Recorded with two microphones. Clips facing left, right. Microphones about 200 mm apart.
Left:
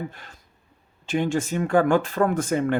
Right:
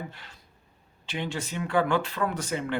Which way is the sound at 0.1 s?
50° left (ahead or behind).